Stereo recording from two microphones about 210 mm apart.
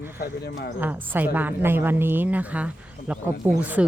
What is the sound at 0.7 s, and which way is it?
Speech, 10° right (ahead or behind).